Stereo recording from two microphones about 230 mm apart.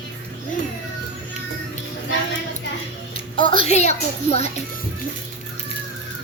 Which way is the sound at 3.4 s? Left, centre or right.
Left.